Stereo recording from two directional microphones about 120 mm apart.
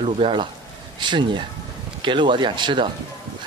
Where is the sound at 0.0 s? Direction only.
45° right (ahead or behind).